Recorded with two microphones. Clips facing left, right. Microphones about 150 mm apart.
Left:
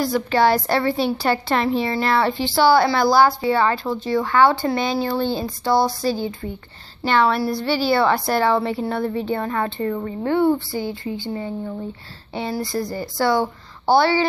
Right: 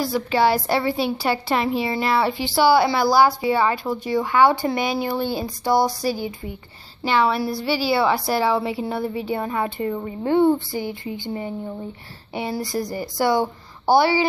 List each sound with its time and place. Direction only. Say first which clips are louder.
0.0 s a woman's voice: left 2 dB; 5° right (ahead or behind)